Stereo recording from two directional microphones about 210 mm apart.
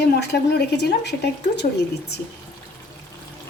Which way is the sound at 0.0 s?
50° left (ahead or behind).